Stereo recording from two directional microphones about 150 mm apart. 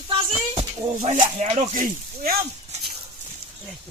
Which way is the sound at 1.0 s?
55° right (ahead or behind).